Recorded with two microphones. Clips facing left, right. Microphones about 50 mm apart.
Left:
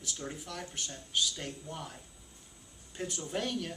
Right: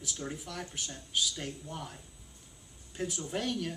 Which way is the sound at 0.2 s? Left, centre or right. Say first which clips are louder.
Right 2 dB; centre.